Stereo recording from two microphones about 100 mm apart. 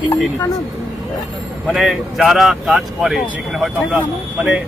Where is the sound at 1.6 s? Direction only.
Centre (ahead or behind).